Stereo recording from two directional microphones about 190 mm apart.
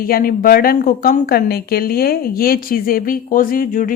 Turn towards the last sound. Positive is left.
turn(degrees=45)  # may be behind; listen again after turning